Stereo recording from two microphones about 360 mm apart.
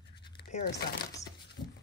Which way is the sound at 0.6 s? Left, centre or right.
Left.